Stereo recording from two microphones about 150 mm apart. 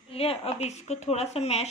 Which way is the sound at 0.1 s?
40° left (ahead or behind).